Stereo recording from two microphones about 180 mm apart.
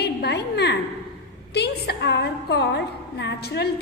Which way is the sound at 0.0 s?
65° left (ahead or behind).